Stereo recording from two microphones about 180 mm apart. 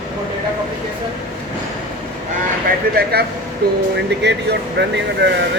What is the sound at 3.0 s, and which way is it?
Speech, 55° right (ahead or behind).